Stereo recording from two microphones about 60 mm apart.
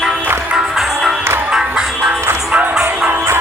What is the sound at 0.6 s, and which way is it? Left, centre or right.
Music, centre.